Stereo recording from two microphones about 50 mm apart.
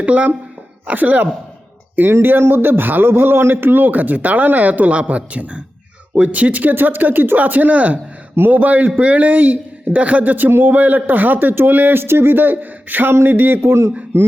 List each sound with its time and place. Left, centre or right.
0.0 s speech: right
2.2 s a man's voice: right